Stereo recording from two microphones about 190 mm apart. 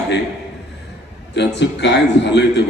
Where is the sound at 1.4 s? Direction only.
65° left (ahead or behind).